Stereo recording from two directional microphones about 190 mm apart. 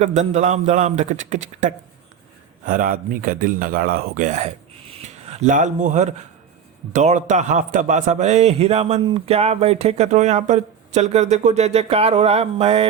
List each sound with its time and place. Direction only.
0.0 s a man's voice: 40° right (ahead or behind)